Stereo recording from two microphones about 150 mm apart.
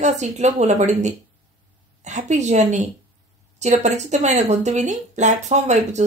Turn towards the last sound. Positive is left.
turn(degrees=-50)  # may be behind; listen again after turning